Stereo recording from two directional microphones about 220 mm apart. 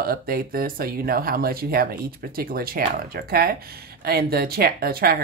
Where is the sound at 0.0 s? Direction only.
40° right (ahead or behind).